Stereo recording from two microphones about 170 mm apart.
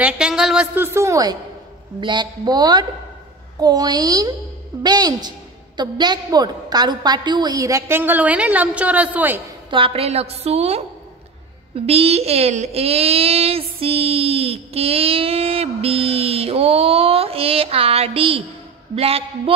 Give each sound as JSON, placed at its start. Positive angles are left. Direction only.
{"t": 0.0, "sound": "a woman's voice", "side_deg": -5}
{"t": 9.7, "sound": "speech", "side_deg": -30}